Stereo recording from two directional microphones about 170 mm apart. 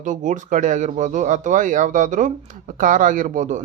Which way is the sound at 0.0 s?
50° right (ahead or behind).